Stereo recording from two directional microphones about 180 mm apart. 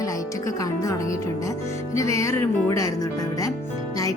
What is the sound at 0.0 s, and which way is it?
A woman's voice, 20° left (ahead or behind).